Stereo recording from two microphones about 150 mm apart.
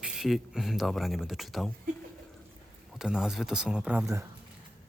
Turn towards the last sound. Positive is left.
turn(degrees=-20)  # may be behind; listen again after turning